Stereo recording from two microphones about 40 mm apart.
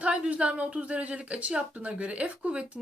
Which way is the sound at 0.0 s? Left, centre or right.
Right.